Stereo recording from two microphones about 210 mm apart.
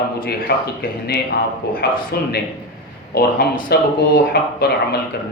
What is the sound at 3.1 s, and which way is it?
Speech, 50° left (ahead or behind).